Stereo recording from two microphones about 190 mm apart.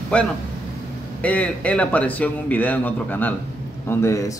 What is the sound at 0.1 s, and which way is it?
A man's voice, 5° left (ahead or behind).